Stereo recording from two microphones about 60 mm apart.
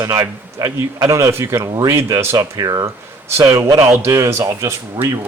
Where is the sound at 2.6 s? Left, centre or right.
Right.